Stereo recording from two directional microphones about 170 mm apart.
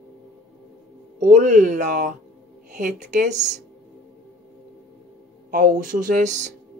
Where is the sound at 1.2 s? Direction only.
45° right (ahead or behind).